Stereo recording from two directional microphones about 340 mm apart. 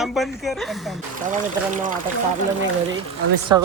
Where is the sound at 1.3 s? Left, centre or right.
Right.